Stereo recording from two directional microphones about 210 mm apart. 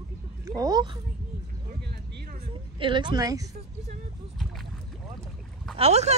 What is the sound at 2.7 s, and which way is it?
Speech, 25° right (ahead or behind).